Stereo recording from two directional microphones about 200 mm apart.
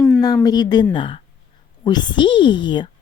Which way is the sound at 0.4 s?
20° left (ahead or behind).